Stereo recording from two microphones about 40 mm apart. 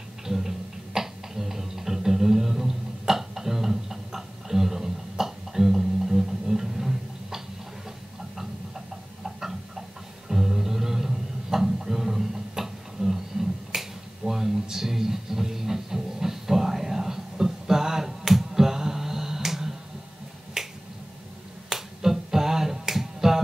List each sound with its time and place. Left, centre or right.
0.3 s a sound: centre
9.2 s music: centre
13.7 s finger snapping: centre